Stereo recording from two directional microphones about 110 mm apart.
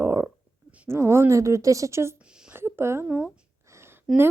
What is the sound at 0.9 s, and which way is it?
Speech, 25° right (ahead or behind).